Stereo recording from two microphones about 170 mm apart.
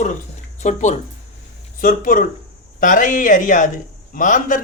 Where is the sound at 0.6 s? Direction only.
45° left (ahead or behind).